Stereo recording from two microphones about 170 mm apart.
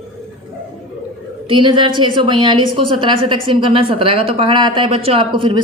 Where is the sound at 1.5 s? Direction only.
30° right (ahead or behind).